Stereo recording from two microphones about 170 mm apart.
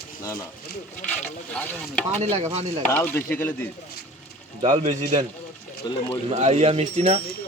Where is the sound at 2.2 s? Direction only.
35° right (ahead or behind).